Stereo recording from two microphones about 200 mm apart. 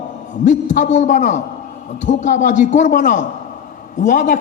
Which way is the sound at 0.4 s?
35° left (ahead or behind).